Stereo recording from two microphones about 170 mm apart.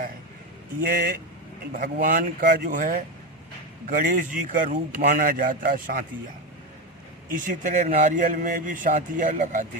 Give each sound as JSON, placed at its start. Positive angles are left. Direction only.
{"t": 0.8, "sound": "a man's voice", "side_deg": -60}
{"t": 7.3, "sound": "a man's voice", "side_deg": -50}